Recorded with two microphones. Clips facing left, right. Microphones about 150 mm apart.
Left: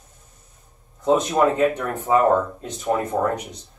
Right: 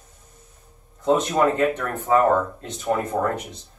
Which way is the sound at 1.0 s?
10° left (ahead or behind).